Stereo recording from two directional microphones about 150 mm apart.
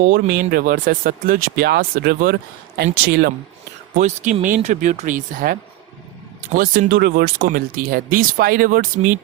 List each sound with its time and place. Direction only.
0.1 s speech: 80° right
2.7 s speech: 90° right
3.9 s speech: 55° right (ahead or behind)